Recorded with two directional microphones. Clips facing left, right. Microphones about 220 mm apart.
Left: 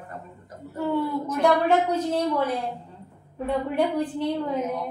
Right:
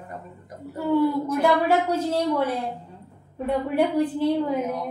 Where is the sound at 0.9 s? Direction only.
5° right (ahead or behind).